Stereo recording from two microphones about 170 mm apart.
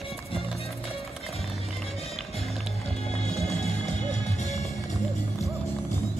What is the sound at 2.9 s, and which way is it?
Music, 40° left (ahead or behind).